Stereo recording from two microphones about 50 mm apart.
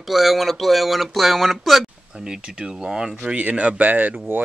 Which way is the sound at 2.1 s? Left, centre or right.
Centre.